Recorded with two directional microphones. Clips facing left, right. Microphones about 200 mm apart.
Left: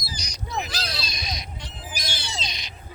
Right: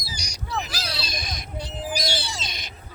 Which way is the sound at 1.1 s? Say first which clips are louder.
Right 2 dB; 50° right (ahead or behind).